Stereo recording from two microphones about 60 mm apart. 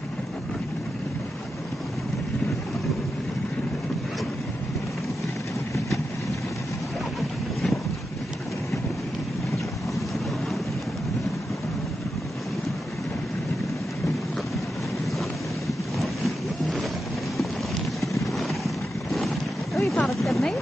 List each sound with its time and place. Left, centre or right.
16.0 s boat: centre
18.2 s vehicle: centre
19.1 s boat: centre
20.1 s a sound: centre